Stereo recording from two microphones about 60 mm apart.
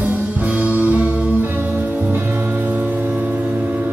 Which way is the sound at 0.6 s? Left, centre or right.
Right.